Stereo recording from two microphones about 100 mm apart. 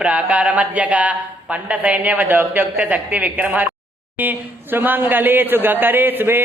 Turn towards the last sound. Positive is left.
turn(degrees=-20)  # may be behind; listen again after turning